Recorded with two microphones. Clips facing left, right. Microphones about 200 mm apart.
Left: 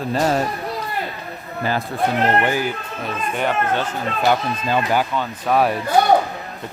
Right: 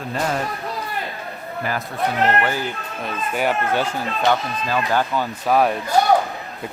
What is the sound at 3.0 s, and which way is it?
Speech, 5° right (ahead or behind).